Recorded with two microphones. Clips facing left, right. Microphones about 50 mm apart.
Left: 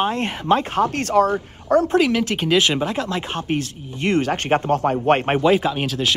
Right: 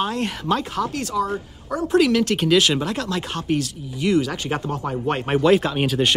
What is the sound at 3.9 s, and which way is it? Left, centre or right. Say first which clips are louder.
Speech: left 1 dB; left.